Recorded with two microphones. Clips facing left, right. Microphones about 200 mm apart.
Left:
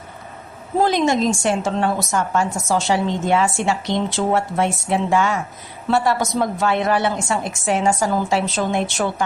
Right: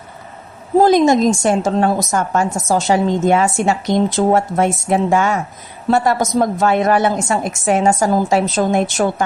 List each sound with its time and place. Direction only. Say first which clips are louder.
0.8 s a woman's voice: right 6 dB; 40° right (ahead or behind)